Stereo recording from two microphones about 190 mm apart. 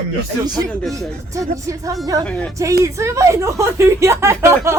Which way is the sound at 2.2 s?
5° left (ahead or behind).